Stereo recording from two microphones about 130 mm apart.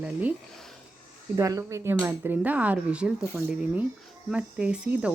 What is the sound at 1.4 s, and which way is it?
Speech, 25° right (ahead or behind).